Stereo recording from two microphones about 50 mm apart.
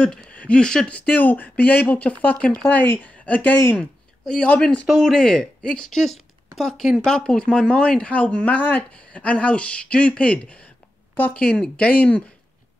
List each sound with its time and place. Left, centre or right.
0.3 s speech: left
0.8 s speech: left
2.7 s speech: left
4.2 s speech: centre
5.9 s speech: centre; by 12.2 s left